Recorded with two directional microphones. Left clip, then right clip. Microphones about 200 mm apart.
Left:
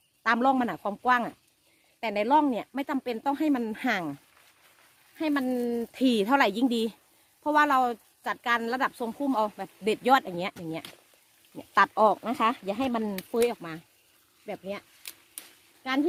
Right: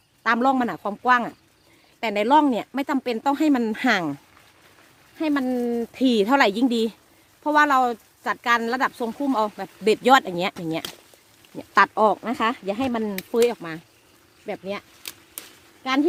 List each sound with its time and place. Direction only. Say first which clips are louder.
0.2 s speech: right 4 dB; 20° left (ahead or behind)
2.0 s speech: right 5 dB; 5° left (ahead or behind); by 4.2 s 20° right (ahead or behind)
5.1 s speech: right 4 dB; centre (ahead or behind)
9.9 s speech: right 6 dB; 5° right (ahead or behind)
11.5 s speech: right 5 dB; 15° left (ahead or behind)